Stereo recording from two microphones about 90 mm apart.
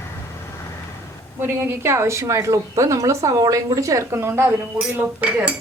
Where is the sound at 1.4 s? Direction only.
25° right (ahead or behind).